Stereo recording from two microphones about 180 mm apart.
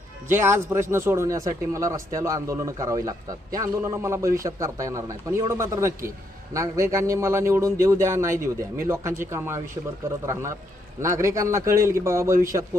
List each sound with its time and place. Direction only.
0.3 s speech: 15° right (ahead or behind)
11.0 s speech: 15° right (ahead or behind)